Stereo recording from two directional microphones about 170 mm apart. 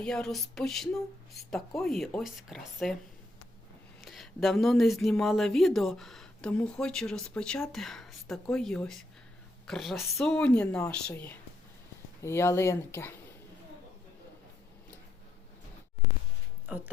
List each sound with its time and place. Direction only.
0.0 s speech: 5° left (ahead or behind)
4.0 s speech: centre (ahead or behind)
16.7 s speech: 5° right (ahead or behind)